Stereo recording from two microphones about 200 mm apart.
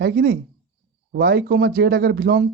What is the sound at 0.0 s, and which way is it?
A woman's voice, 55° right (ahead or behind).